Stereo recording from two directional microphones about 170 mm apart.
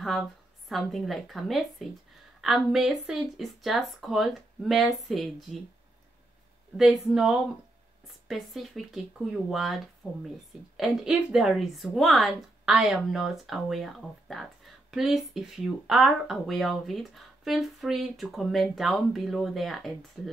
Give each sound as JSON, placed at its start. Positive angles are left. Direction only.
{"t": 0.0, "sound": "a woman's voice", "side_deg": 0}
{"t": 6.8, "sound": "speech", "side_deg": 0}
{"t": 10.8, "sound": "speech", "side_deg": 0}